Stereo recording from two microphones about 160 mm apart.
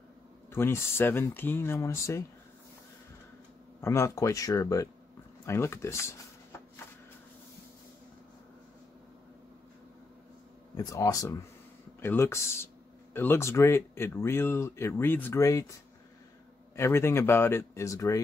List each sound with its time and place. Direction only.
0.5 s speech: 15° left (ahead or behind)
3.8 s speech: 15° left (ahead or behind)
10.8 s speech: 20° left (ahead or behind)
16.7 s speech: 15° left (ahead or behind)